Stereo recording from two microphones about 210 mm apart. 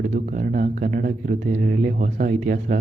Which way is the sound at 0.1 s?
40° right (ahead or behind).